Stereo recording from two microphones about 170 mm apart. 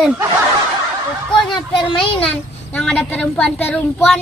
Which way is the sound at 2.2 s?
5° left (ahead or behind).